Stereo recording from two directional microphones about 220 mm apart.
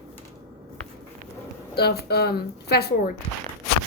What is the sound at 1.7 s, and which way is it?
Speech, 45° left (ahead or behind).